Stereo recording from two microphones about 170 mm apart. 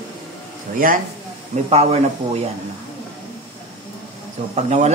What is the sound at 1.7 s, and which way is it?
Speech, 40° right (ahead or behind).